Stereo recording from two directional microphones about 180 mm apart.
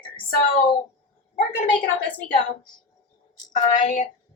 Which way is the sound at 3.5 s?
45° left (ahead or behind).